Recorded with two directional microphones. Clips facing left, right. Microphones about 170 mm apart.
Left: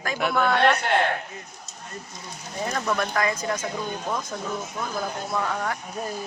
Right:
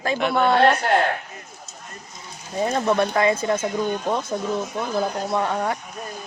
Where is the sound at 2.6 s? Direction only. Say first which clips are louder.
Right 6 dB; 25° right (ahead or behind).